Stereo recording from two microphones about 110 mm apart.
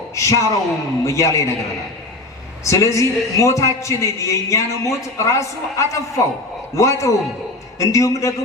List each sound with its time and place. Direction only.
0.2 s speech: 30° left (ahead or behind)
2.6 s speech: 25° left (ahead or behind)